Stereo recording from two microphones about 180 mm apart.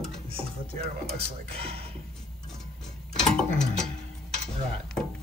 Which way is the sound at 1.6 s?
30° right (ahead or behind).